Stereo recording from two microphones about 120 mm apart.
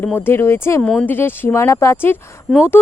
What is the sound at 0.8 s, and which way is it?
Speech, 5° left (ahead or behind).